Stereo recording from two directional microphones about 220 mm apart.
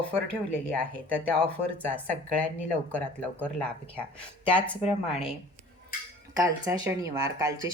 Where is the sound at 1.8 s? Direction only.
5° left (ahead or behind).